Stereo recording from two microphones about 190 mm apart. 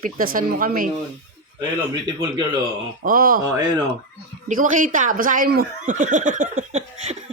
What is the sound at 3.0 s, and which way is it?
Speech, 50° right (ahead or behind).